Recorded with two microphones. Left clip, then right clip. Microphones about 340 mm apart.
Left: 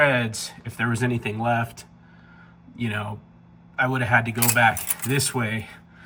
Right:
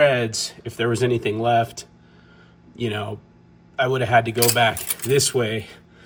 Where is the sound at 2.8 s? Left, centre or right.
Centre.